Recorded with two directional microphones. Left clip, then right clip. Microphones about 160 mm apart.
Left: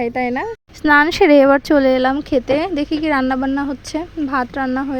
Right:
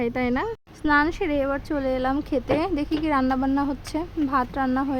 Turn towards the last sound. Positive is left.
turn(degrees=20)  # may be behind; listen again after turning